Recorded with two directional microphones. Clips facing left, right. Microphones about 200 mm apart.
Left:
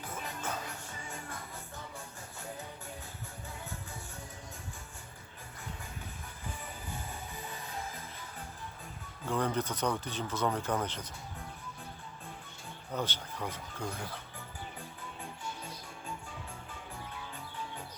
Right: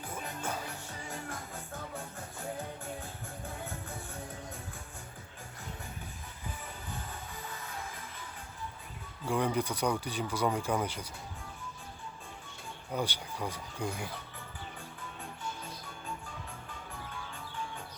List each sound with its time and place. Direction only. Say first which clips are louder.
0.1 s music: right 1 dB; 10° right (ahead or behind)
1.1 s music: right 5 dB; 45° right (ahead or behind)
9.2 s speech: right 2 dB; 10° right (ahead or behind)
12.9 s speech: right 2 dB; 10° right (ahead or behind)